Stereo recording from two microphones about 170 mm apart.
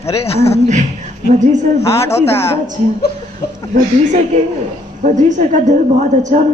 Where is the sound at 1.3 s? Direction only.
45° right (ahead or behind).